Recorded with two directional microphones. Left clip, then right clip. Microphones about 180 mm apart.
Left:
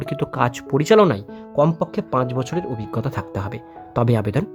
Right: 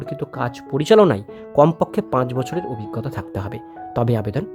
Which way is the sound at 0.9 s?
10° right (ahead or behind).